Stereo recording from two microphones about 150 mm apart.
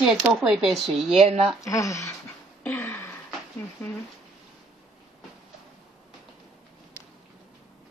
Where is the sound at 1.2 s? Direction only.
40° right (ahead or behind).